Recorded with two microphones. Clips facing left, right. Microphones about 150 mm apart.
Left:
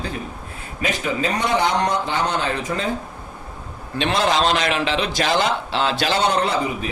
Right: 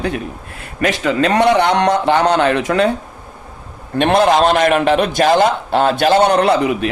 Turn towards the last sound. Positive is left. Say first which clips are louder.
# right 8 dB
turn(degrees=-75)  # may be behind; listen again after turning